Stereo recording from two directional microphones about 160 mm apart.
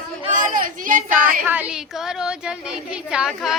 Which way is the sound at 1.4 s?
10° right (ahead or behind).